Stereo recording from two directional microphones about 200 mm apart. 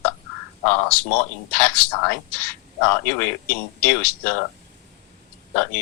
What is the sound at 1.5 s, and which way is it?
Speech, 5° left (ahead or behind).